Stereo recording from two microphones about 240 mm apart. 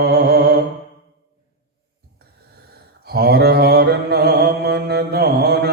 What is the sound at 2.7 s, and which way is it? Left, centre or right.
Mantra, right.